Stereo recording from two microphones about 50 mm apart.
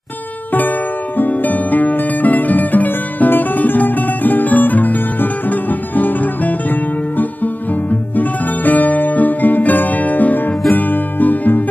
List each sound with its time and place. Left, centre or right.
1.1 s music: left